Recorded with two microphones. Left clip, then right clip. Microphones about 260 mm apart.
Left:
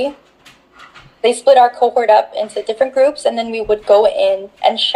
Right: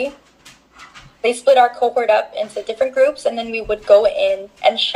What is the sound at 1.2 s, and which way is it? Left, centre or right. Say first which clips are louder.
Speech: left 3 dB; left.